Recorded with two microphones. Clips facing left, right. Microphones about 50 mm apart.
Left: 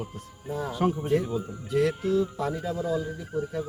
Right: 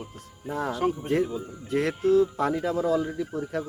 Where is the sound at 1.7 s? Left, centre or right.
Right.